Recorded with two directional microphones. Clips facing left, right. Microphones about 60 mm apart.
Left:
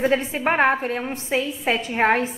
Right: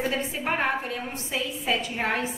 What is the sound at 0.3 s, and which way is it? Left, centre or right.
A woman's voice, left.